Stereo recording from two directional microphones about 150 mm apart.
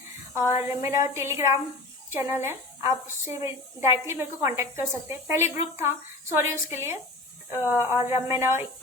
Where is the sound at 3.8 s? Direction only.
20° right (ahead or behind).